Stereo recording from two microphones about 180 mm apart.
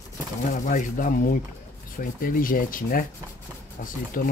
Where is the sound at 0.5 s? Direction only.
45° left (ahead or behind).